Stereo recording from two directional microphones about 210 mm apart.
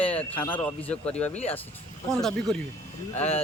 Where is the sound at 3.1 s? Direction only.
30° left (ahead or behind).